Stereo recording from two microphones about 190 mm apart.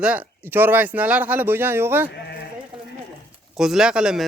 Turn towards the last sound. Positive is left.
turn(degrees=-5)  # may be behind; listen again after turning